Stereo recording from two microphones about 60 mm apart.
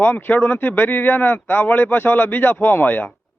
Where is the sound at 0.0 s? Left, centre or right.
Left.